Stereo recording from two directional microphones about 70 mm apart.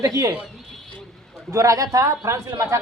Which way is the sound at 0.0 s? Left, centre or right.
Right.